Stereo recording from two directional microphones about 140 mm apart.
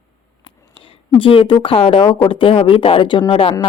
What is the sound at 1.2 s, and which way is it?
A woman's voice, 40° left (ahead or behind).